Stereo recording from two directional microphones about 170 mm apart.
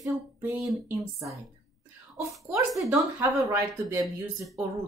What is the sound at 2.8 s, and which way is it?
Speech, 15° right (ahead or behind).